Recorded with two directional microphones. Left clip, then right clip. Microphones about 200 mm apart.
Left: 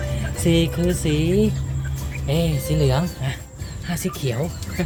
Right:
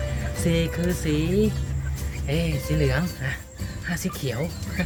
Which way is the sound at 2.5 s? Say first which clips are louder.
Left 3 dB; 20° left (ahead or behind).